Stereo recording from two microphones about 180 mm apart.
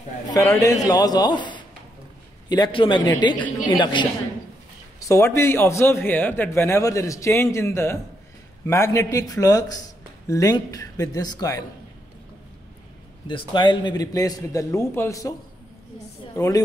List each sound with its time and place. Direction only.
0.3 s a man's voice: 20° left (ahead or behind)
13.3 s a man's voice: 25° left (ahead or behind)
16.3 s a man's voice: 20° left (ahead or behind)